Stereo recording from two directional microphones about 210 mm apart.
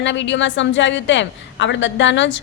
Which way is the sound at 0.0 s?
60° left (ahead or behind).